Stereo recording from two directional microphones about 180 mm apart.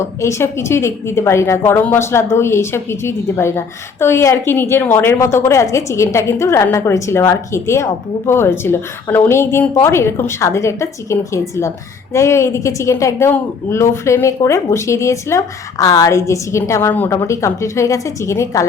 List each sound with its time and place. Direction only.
0.0 s a woman's voice: 15° left (ahead or behind)